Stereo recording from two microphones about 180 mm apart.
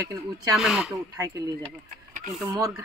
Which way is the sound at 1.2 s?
20° right (ahead or behind).